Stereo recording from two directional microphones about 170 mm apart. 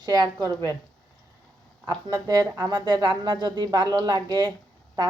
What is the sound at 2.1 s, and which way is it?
Speech, 20° right (ahead or behind).